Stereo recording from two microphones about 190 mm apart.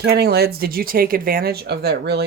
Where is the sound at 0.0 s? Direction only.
55° right (ahead or behind).